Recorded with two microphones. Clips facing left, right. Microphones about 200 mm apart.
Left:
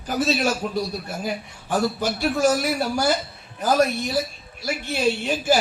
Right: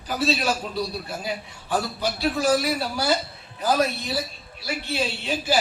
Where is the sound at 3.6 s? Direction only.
50° left (ahead or behind).